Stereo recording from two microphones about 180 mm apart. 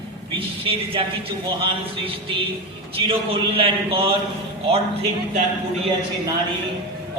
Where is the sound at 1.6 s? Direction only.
30° right (ahead or behind).